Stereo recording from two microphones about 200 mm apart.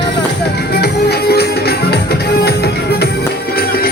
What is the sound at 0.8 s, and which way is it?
Music, 55° left (ahead or behind).